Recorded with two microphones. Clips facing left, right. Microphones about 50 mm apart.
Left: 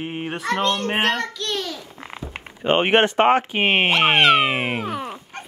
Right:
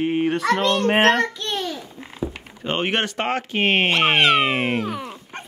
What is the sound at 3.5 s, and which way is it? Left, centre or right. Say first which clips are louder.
Speech: left 1 dB; centre.